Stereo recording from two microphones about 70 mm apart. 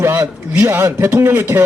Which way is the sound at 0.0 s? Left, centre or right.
Right.